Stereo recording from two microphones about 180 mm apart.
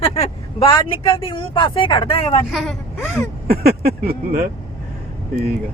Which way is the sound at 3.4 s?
60° right (ahead or behind).